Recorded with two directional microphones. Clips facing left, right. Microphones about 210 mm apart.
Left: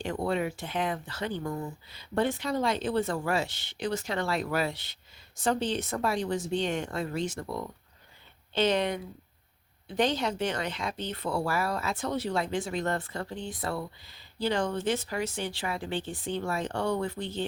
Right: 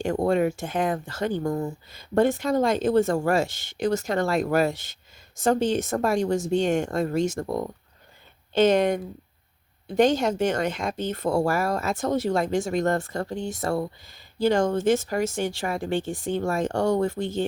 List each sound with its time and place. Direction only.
0.0 s speech: 45° right (ahead or behind)